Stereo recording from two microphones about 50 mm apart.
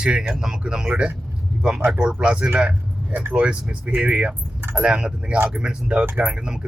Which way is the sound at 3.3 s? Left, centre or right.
Centre.